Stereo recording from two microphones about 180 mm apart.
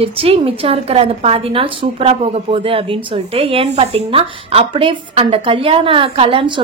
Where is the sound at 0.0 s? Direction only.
30° right (ahead or behind).